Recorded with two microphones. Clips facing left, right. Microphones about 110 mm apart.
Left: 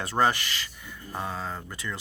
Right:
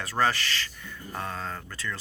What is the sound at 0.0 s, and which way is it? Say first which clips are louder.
Speech: left 2 dB; 20° left (ahead or behind).